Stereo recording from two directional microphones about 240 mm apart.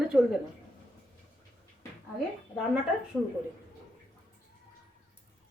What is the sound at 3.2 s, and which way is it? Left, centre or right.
Speech, centre.